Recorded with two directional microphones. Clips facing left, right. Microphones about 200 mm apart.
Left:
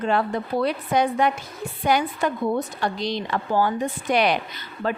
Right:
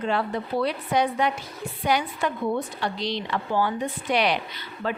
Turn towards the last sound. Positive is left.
turn(degrees=45)  # may be behind; listen again after turning